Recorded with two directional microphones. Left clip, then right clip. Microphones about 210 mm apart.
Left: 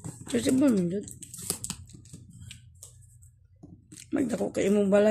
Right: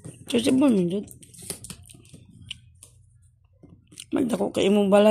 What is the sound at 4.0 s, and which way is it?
Speech, 25° right (ahead or behind).